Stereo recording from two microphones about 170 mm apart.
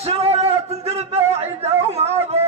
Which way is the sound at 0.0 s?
35° right (ahead or behind).